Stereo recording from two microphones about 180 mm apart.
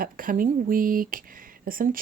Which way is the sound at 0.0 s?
50° right (ahead or behind).